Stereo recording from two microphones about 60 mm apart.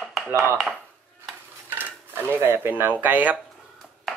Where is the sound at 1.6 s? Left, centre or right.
Right.